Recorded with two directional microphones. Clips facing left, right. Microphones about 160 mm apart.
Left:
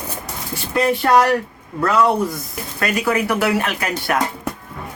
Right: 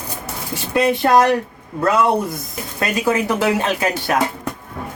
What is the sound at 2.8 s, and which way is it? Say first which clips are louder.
Speech: right 1 dB; 20° right (ahead or behind).